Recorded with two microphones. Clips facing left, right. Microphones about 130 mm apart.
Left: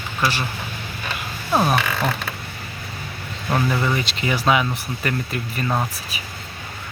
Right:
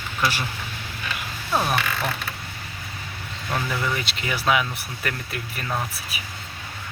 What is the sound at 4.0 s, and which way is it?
Speech, centre (ahead or behind).